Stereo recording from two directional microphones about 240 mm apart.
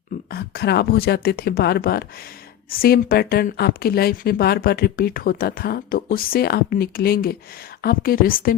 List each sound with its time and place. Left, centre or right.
0.3 s speech: left